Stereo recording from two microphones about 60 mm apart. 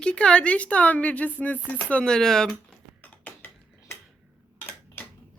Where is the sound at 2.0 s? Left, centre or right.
Centre.